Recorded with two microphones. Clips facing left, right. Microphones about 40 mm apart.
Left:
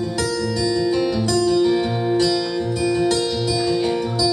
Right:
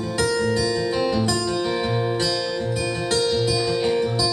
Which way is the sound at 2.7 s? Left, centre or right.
Right.